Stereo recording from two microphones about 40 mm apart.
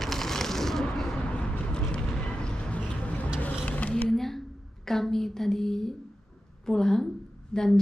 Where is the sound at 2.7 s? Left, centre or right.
Left.